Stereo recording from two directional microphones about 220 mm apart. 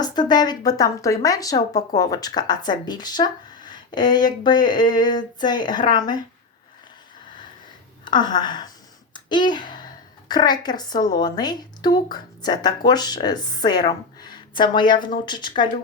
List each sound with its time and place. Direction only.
0.0 s speech: 20° left (ahead or behind)
8.0 s a woman's voice: 20° left (ahead or behind)